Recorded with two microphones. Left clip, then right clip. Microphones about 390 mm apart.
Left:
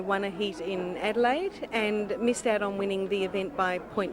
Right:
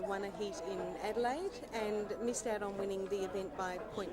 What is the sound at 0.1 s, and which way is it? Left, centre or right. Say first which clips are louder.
A woman's voice: left 10 dB; left.